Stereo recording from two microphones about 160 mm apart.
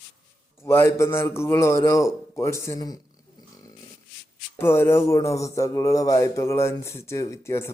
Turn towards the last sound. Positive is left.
turn(degrees=15)  # may be behind; listen again after turning